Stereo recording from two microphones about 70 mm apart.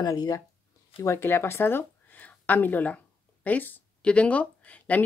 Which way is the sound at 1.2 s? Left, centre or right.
Left.